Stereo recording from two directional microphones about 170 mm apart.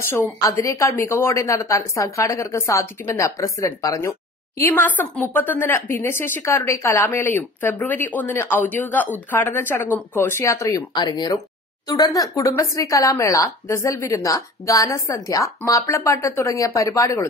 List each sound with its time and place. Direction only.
0.1 s speech: 20° left (ahead or behind)